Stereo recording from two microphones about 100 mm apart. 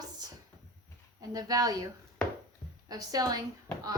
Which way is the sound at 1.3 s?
40° right (ahead or behind).